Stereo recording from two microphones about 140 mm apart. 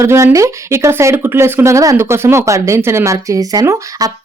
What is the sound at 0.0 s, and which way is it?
Speech, 20° right (ahead or behind).